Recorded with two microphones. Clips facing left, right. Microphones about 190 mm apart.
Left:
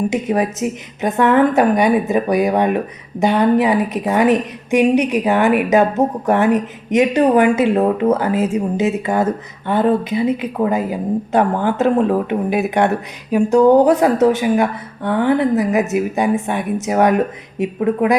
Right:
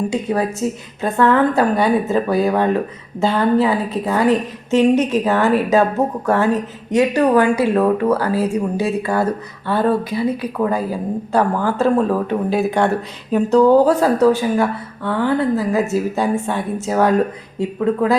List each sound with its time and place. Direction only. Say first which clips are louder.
0.1 s a woman's voice: left 2 dB; 20° left (ahead or behind)